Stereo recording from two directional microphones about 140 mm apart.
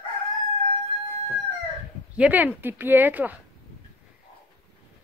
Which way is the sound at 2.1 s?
10° right (ahead or behind).